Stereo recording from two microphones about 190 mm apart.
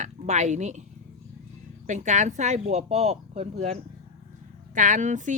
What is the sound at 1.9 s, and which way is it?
Speech, 40° right (ahead or behind).